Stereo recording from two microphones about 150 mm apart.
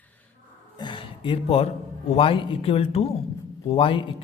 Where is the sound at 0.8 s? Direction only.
30° left (ahead or behind).